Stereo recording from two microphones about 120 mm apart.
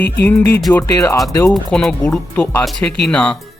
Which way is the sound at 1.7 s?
5° left (ahead or behind).